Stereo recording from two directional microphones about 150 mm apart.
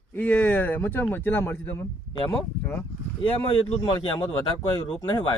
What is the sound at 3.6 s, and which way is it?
Speech, 35° left (ahead or behind).